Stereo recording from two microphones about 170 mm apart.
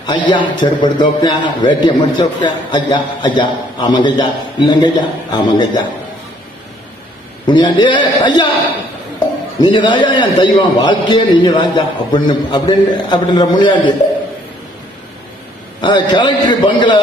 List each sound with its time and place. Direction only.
0.0 s a man's voice: 25° left (ahead or behind)
7.4 s a man's voice: 25° left (ahead or behind)
9.6 s a man's voice: 25° left (ahead or behind)
15.8 s a man's voice: 25° left (ahead or behind)